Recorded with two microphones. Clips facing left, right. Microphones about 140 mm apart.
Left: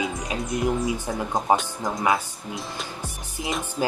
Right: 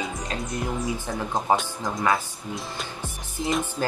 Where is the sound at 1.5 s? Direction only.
15° left (ahead or behind).